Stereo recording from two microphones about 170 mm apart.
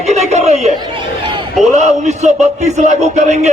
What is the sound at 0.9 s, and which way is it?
Speech, 30° right (ahead or behind).